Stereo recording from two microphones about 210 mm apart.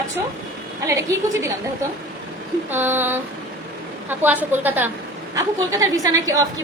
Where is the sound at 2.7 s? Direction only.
10° right (ahead or behind).